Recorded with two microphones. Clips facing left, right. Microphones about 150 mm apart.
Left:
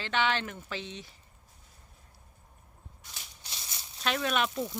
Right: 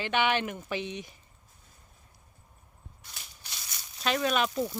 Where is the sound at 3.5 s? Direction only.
25° left (ahead or behind).